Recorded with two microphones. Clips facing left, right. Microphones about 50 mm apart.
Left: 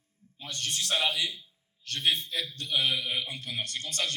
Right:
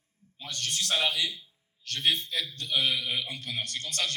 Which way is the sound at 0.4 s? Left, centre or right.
Left.